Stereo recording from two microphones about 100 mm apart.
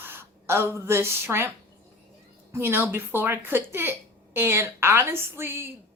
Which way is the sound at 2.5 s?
25° right (ahead or behind).